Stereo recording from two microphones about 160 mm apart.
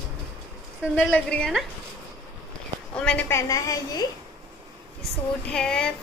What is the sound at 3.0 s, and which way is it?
Speech, 5° left (ahead or behind).